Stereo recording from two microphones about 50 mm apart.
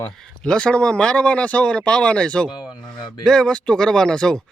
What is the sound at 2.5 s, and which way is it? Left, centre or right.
Speech, centre.